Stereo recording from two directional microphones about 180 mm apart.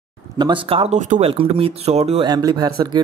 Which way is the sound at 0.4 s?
30° right (ahead or behind).